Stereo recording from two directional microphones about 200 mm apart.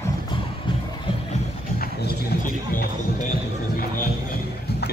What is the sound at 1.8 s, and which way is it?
Run, 50° left (ahead or behind).